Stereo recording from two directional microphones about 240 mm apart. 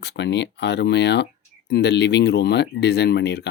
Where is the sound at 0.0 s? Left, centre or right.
Left.